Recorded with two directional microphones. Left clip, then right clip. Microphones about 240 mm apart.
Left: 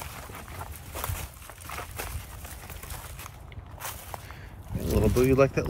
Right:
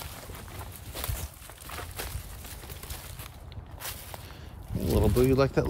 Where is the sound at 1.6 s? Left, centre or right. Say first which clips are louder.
Left 2 dB; centre.